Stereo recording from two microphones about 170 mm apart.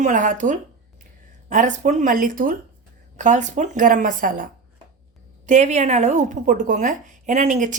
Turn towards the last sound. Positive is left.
turn(degrees=-45)  # may be behind; listen again after turning